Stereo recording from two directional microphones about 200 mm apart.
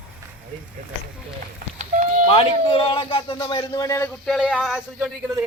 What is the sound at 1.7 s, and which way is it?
Livestock, 40° right (ahead or behind).